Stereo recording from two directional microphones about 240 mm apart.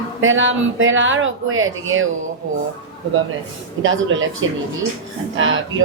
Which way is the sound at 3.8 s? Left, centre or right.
Right.